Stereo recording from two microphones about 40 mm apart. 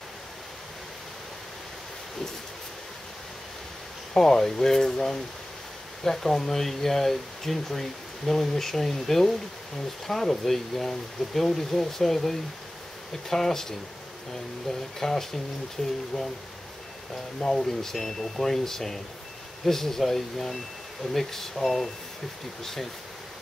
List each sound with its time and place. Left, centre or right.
4.1 s speech: centre
15.8 s speech: left
17.4 s speech: centre